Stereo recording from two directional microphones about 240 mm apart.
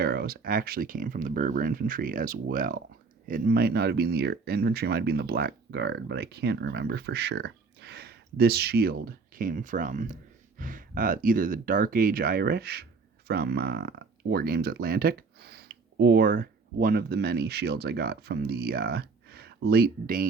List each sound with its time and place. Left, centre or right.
0.0 s speech: right